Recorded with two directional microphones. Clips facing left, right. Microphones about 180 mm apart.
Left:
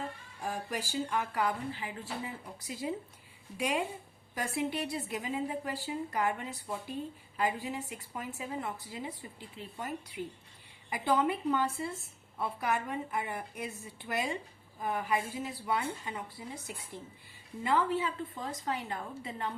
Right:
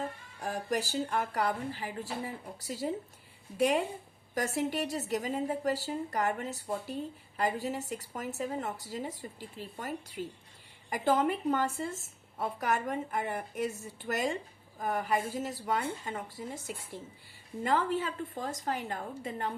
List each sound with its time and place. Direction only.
0.4 s a woman's voice: 45° right (ahead or behind)
4.4 s a woman's voice: 45° right (ahead or behind)
17.6 s a woman's voice: 45° right (ahead or behind)